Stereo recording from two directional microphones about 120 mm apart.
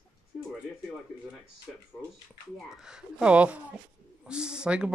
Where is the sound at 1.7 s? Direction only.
5° right (ahead or behind).